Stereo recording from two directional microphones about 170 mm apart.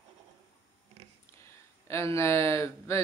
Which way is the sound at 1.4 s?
15° left (ahead or behind).